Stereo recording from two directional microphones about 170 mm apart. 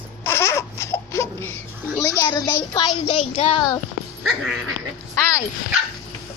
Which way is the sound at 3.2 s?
35° left (ahead or behind).